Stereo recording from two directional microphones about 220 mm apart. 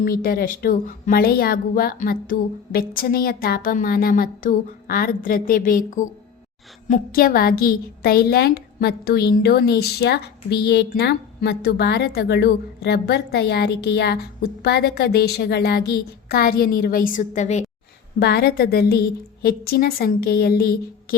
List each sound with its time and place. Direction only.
0.0 s a woman's voice: 40° left (ahead or behind)
18.2 s a woman's voice: 45° left (ahead or behind)